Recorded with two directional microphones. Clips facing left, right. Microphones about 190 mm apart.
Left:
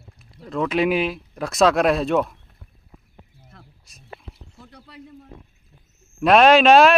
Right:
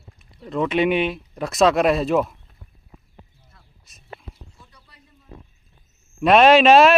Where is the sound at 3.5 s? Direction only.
60° left (ahead or behind).